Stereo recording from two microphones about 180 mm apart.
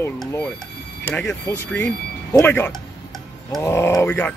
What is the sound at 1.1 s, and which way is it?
Music, 10° left (ahead or behind).